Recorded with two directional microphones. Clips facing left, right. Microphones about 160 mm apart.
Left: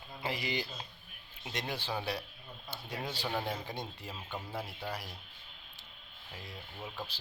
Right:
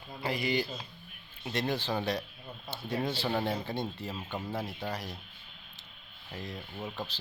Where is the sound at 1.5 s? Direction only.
10° left (ahead or behind).